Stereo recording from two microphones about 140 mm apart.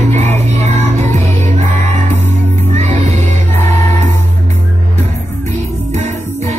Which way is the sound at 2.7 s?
55° right (ahead or behind).